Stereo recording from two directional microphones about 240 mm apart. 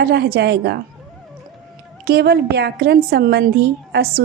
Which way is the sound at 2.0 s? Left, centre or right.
Right.